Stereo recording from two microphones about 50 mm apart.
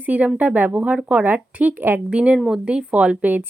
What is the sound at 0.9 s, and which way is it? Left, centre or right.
Speech, right.